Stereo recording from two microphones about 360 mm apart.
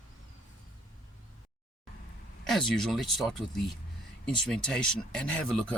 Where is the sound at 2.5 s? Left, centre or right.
Centre.